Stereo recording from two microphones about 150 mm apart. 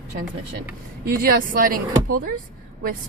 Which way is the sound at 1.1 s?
70° right (ahead or behind).